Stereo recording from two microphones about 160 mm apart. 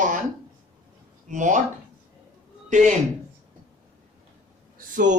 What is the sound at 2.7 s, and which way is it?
Speech, 50° right (ahead or behind).